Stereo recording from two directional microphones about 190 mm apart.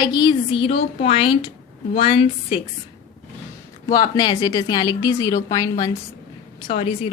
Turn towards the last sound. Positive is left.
turn(degrees=30)  # may be behind; listen again after turning